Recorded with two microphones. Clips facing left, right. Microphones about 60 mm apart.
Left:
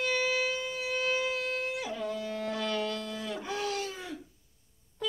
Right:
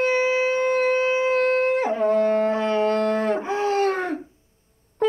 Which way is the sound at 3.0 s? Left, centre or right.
Right.